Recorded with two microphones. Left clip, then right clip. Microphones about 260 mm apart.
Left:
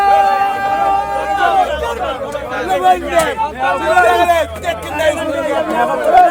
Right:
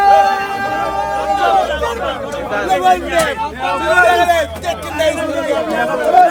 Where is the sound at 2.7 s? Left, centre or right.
Left.